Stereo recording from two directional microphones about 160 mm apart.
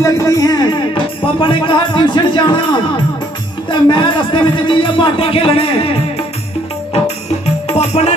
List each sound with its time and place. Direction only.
0.0 s a sound: 20° left (ahead or behind)
1.2 s speech: 30° left (ahead or behind)
3.7 s speech: 30° left (ahead or behind)
7.6 s music: 40° left (ahead or behind)